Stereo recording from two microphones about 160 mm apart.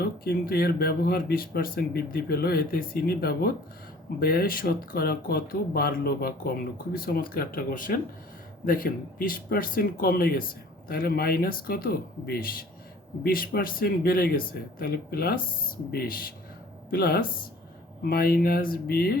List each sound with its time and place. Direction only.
0.0 s speech: 70° left (ahead or behind)